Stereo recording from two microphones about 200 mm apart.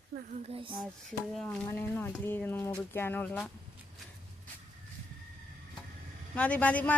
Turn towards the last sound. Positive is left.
turn(degrees=5)  # may be behind; listen again after turning